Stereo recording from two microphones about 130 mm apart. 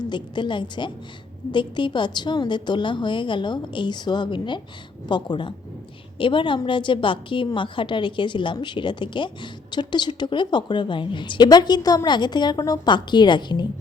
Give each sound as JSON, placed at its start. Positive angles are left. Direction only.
{"t": 0.1, "sound": "a woman's voice", "side_deg": 35}